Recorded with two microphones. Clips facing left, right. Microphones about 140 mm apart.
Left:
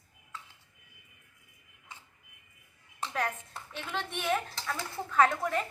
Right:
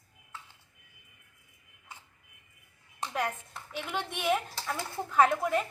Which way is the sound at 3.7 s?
15° right (ahead or behind).